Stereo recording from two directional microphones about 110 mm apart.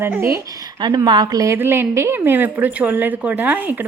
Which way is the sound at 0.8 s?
40° right (ahead or behind).